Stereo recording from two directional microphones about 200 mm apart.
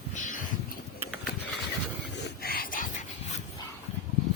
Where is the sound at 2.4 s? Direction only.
45° left (ahead or behind).